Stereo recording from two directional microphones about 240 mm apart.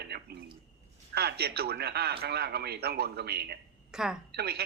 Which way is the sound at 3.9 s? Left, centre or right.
Centre.